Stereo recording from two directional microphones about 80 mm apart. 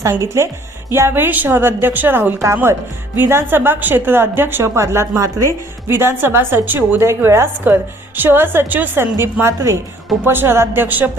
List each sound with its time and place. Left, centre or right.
0.1 s a woman's voice: right
5.9 s a woman's voice: right